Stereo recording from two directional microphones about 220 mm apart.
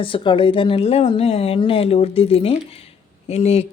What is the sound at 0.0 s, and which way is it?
Speech, 25° left (ahead or behind).